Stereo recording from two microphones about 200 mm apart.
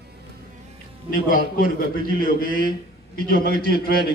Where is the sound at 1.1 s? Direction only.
45° left (ahead or behind).